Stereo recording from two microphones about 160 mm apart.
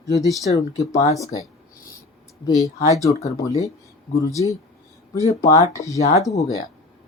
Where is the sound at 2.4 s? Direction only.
20° left (ahead or behind).